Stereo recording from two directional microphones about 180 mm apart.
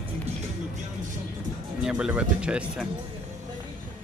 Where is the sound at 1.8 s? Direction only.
5° right (ahead or behind).